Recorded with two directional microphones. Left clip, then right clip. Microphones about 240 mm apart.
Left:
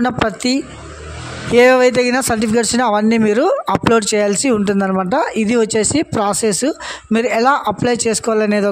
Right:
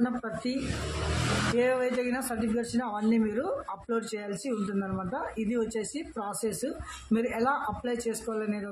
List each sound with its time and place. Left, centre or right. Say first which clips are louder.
0.0 s a man's voice: left 15 dB; left
1.6 s a man's voice: left 19 dB; left